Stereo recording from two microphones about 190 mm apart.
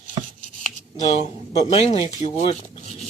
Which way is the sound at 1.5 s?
35° left (ahead or behind).